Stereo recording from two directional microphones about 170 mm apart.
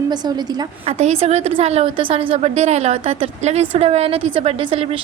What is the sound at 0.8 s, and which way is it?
A woman's voice, 40° right (ahead or behind).